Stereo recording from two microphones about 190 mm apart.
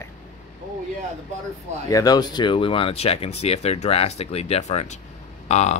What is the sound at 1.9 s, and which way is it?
A man's voice, 20° left (ahead or behind).